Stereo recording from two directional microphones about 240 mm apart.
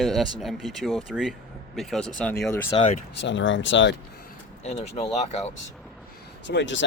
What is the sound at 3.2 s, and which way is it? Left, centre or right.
Speech, left.